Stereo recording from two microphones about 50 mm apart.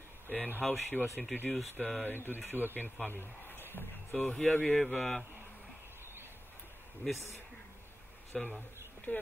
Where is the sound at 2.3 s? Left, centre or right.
Right.